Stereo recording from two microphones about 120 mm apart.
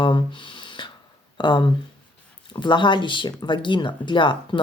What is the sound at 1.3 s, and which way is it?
Speech, 40° left (ahead or behind).